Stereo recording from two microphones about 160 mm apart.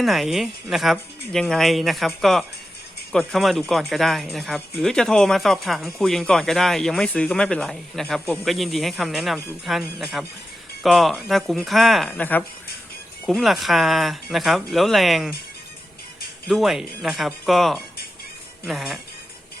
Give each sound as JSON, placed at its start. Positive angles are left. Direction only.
{"t": 0.0, "sound": "speech", "side_deg": 0}
{"t": 12.2, "sound": "speech", "side_deg": 10}
{"t": 13.2, "sound": "speech", "side_deg": 0}
{"t": 16.5, "sound": "speech", "side_deg": 0}